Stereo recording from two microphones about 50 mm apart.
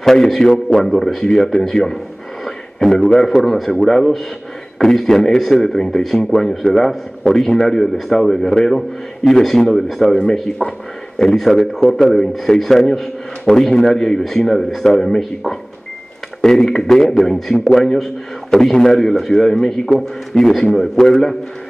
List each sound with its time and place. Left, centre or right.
0.0 s a man's voice: centre
2.4 s a sound: centre
3.1 s a man's voice: centre
10.0 s a man's voice: centre
10.6 s a man's voice: centre